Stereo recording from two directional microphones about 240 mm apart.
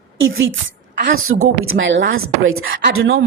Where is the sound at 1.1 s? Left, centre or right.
Right.